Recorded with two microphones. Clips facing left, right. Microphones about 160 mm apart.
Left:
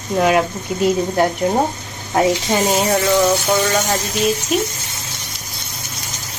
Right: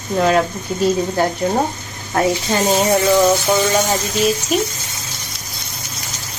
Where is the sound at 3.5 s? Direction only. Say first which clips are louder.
Right 1 dB; 15° right (ahead or behind).